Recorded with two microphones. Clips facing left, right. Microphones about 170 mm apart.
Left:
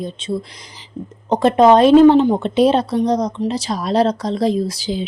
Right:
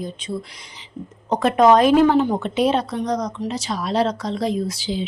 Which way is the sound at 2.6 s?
35° left (ahead or behind).